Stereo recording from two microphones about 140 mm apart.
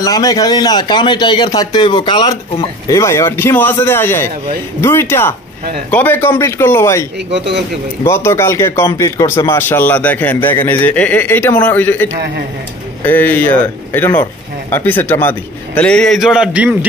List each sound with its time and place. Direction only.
0.0 s a man's voice: 25° left (ahead or behind); by 16.7 s 5° right (ahead or behind)